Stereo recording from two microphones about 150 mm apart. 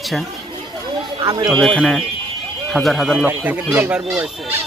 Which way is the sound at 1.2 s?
30° right (ahead or behind).